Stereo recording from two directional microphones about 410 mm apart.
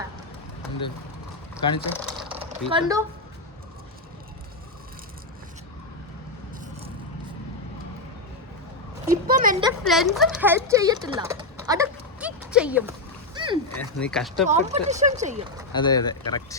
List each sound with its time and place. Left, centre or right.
1.9 s speech: centre
9.0 s a sound: right
9.6 s speech: centre
13.3 s splash: centre
13.7 s speech: centre
14.4 s speech: centre
15.7 s speech: centre